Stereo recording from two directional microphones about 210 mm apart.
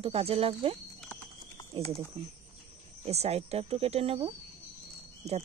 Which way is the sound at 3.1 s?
30° right (ahead or behind).